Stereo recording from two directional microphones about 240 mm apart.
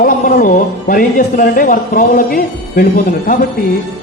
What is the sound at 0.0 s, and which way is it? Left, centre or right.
Speech, left.